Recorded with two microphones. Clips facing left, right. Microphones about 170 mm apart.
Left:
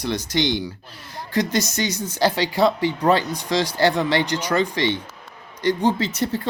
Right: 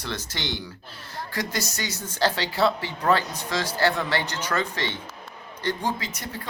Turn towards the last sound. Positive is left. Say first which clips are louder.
# left 9 dB
turn(degrees=30)  # may be behind; listen again after turning